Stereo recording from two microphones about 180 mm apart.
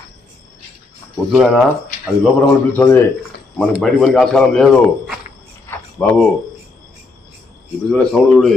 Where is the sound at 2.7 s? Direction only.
10° left (ahead or behind).